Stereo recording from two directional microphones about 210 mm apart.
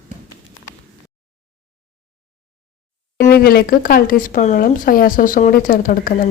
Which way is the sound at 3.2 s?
45° left (ahead or behind).